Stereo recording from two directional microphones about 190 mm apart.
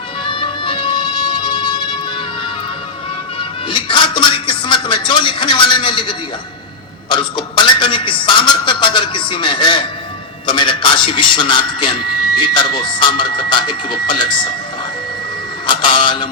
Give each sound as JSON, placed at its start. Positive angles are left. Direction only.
{"t": 0.3, "sound": "music", "side_deg": 25}
{"t": 3.7, "sound": "a man's voice", "side_deg": 25}
{"t": 15.6, "sound": "speech", "side_deg": 25}